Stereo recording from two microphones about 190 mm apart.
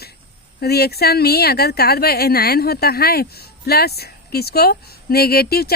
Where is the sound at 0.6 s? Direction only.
55° left (ahead or behind).